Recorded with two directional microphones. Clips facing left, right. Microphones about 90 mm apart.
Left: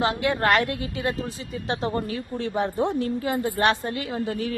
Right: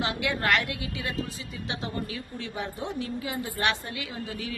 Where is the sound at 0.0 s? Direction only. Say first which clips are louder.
Left 6 dB; 40° left (ahead or behind).